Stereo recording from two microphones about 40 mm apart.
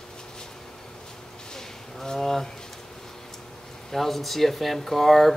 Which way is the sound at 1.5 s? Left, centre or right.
Centre.